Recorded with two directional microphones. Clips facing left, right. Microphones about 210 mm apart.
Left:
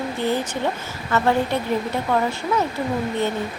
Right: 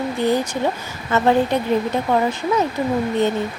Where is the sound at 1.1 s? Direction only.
20° right (ahead or behind).